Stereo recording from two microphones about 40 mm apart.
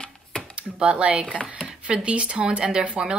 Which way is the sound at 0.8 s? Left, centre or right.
Right.